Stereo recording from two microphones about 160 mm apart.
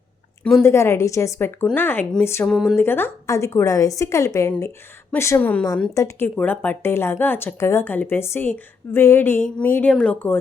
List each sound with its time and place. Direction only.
0.6 s a woman's voice: 15° left (ahead or behind)
2.5 s speech: centre (ahead or behind)
2.7 s a woman's voice: 15° left (ahead or behind)